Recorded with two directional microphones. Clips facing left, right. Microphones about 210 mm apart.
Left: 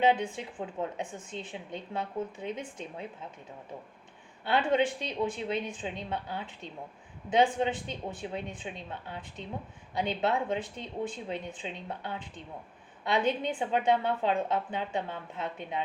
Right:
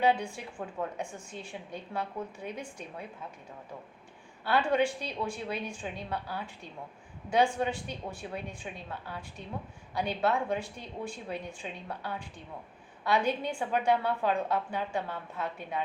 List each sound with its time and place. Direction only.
0.0 s a woman's voice: 20° left (ahead or behind)
4.7 s a woman's voice: 20° left (ahead or behind)